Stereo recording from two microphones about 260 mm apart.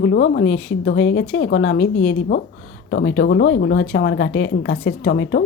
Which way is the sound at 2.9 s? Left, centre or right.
Left.